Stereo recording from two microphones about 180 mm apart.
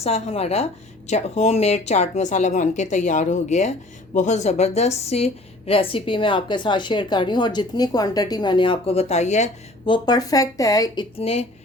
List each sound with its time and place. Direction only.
0.0 s speech: 35° left (ahead or behind)
9.9 s speech: 20° left (ahead or behind)
11.2 s speech: 35° left (ahead or behind)